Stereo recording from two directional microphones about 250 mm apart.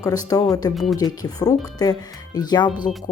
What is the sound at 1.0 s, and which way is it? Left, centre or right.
Speech, centre.